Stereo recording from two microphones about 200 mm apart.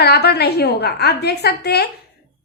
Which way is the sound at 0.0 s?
55° left (ahead or behind).